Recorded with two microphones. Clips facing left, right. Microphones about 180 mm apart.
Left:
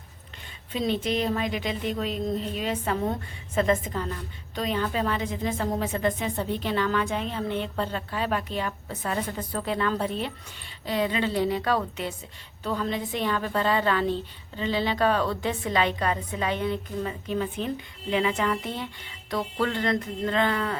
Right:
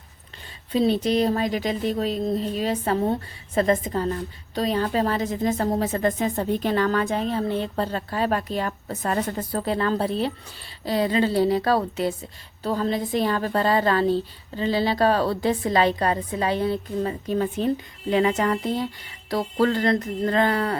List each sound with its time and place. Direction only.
0.7 s a woman's voice: 35° right (ahead or behind)